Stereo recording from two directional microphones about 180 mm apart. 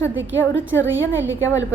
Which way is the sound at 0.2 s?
90° right.